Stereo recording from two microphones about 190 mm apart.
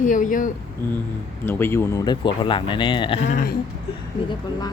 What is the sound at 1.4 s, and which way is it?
Speech, 10° left (ahead or behind).